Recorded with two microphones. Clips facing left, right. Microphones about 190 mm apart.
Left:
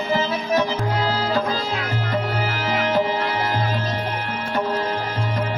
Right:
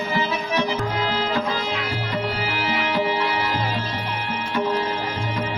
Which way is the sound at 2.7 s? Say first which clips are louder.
Left 3 dB; 45° left (ahead or behind).